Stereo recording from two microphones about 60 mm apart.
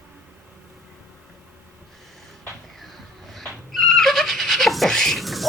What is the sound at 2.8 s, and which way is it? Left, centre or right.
Neigh, centre.